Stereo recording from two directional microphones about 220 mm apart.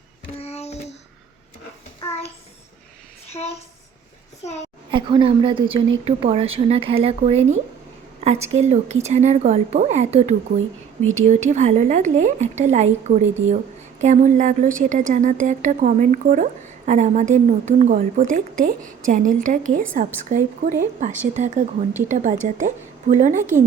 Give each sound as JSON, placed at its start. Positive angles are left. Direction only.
{"t": 0.3, "sound": "child singing", "side_deg": 30}
{"t": 3.3, "sound": "a woman's voice", "side_deg": 30}
{"t": 4.9, "sound": "a woman's voice", "side_deg": -20}